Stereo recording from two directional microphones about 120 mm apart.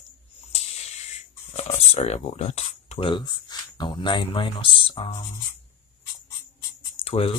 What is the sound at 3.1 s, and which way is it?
Speech, 40° left (ahead or behind).